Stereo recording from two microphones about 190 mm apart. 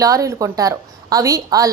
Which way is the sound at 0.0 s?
15° right (ahead or behind).